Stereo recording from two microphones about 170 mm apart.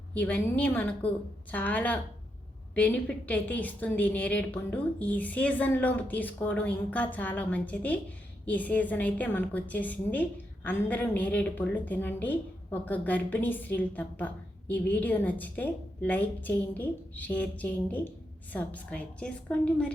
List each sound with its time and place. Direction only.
0.1 s a woman's voice: 10° left (ahead or behind)